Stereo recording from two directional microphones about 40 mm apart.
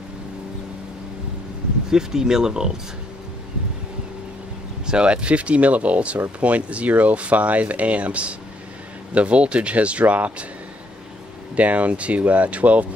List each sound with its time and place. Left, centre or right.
1.9 s speech: centre
4.8 s speech: right
11.5 s speech: right